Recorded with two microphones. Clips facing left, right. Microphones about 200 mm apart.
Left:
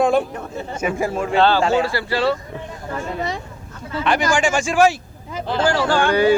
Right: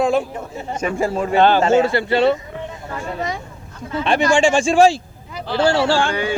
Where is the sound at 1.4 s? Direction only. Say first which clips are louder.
Right 3 dB; 15° right (ahead or behind).